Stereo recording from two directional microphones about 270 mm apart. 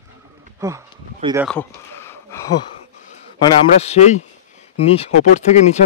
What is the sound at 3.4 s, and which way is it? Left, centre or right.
Speech, left.